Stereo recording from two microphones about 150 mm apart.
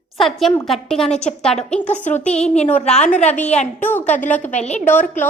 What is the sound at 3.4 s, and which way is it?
Speech, 50° left (ahead or behind).